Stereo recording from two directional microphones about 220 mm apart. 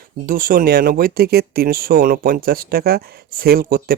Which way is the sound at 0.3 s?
40° right (ahead or behind).